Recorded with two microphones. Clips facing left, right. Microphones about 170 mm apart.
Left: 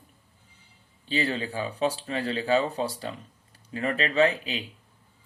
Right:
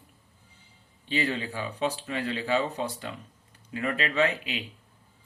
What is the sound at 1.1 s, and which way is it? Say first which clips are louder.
Speech: left 1 dB; 35° left (ahead or behind).